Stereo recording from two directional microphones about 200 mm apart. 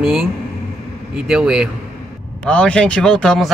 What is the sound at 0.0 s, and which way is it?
Speech, 5° right (ahead or behind).